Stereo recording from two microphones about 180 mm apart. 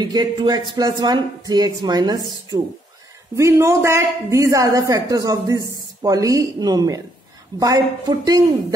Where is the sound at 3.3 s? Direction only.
15° right (ahead or behind).